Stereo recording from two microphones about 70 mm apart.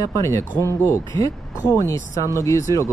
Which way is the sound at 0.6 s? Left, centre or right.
Left.